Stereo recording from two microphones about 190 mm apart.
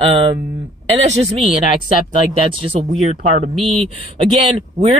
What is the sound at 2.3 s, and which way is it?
Speech, 30° right (ahead or behind).